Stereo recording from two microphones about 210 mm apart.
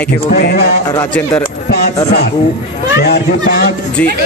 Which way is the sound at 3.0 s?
45° left (ahead or behind).